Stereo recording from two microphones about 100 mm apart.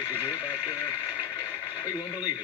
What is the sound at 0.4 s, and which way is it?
Radio, 15° right (ahead or behind).